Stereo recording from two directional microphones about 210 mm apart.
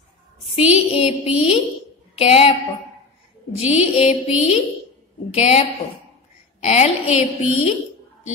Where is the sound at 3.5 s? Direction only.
30° left (ahead or behind).